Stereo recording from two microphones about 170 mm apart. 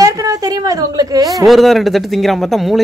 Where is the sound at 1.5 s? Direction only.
Centre (ahead or behind).